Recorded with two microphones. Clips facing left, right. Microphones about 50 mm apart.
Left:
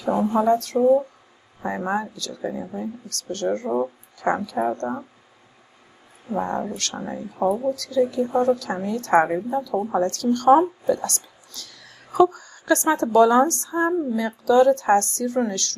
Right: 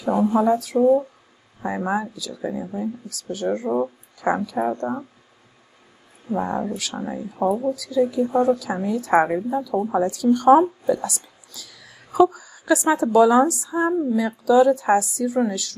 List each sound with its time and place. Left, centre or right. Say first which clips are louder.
0.0 s speech: right 1 dB; centre
6.2 s speech: right 1 dB; centre